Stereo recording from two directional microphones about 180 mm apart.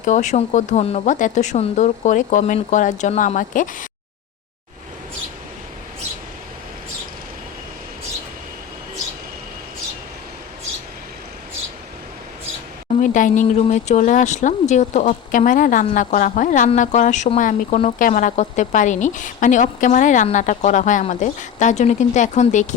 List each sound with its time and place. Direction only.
0.0 s a woman's voice: 40° left (ahead or behind)
13.0 s a woman's voice: 45° left (ahead or behind)